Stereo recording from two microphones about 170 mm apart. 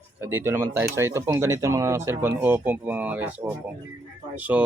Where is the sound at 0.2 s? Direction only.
15° right (ahead or behind).